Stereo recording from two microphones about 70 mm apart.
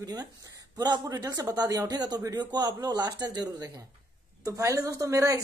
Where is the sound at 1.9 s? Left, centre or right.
Right.